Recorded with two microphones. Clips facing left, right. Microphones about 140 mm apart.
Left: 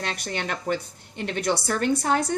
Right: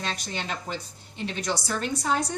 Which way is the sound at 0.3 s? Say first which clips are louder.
Left 5 dB; 60° left (ahead or behind).